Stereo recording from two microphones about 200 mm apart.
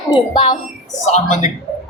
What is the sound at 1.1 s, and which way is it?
Speech, 35° left (ahead or behind).